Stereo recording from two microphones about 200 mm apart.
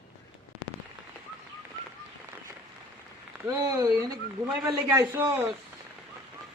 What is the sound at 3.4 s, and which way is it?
Speech, 15° right (ahead or behind).